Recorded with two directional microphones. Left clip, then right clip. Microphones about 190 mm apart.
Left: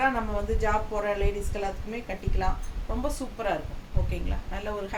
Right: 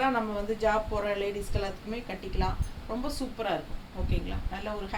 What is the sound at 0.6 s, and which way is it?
Speech, 10° left (ahead or behind).